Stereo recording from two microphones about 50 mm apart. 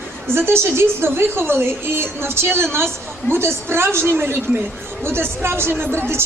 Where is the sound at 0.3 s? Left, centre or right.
Right.